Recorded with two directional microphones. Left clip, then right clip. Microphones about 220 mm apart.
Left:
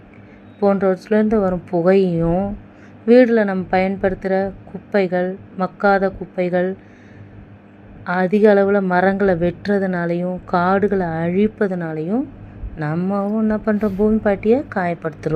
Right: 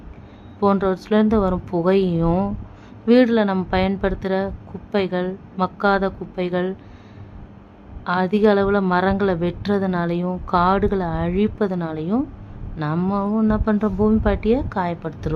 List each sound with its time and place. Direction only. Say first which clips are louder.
0.6 s a woman's voice: left 3 dB; centre (ahead or behind)
8.0 s a woman's voice: left 3 dB; centre (ahead or behind)